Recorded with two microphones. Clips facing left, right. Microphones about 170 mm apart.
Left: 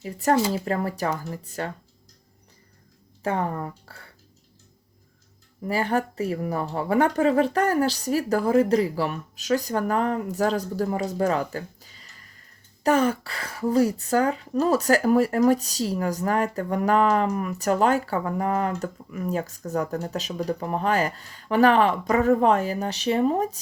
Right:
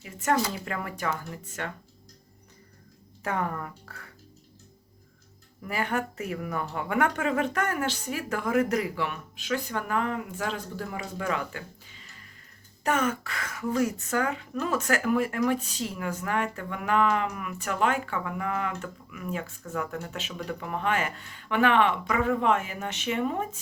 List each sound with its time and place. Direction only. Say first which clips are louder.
0.0 s speech: left 5 dB; 35° left (ahead or behind)
3.2 s speech: left 4 dB; 30° left (ahead or behind)
5.6 s speech: left 5 dB; 30° left (ahead or behind)